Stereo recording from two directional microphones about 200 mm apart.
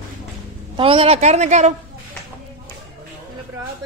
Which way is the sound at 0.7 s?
25° right (ahead or behind).